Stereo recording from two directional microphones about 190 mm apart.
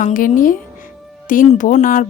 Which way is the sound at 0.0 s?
45° left (ahead or behind).